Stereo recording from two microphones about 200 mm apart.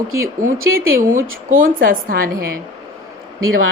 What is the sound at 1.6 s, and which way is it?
Speech, 45° right (ahead or behind).